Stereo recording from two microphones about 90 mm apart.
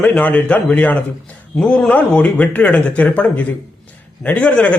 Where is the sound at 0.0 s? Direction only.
20° left (ahead or behind).